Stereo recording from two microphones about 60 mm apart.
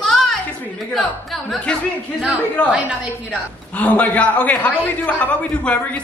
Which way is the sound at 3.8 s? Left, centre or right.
Left.